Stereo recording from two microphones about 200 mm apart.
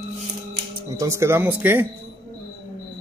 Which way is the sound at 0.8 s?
15° right (ahead or behind).